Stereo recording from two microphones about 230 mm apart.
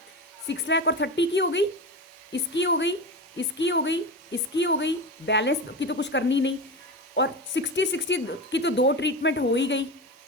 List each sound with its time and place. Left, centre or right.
0.4 s a woman's voice: left